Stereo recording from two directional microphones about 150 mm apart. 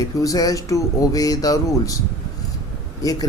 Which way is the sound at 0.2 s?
25° left (ahead or behind).